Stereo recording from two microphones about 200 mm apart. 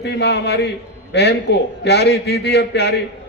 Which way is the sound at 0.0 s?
60° left (ahead or behind).